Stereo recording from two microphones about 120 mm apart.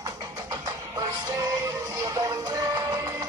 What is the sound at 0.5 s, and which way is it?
Music, 30° right (ahead or behind).